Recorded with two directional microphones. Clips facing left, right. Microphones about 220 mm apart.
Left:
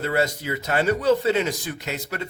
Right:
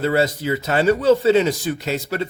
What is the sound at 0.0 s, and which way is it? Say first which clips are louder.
Speech: right 5 dB; 30° right (ahead or behind).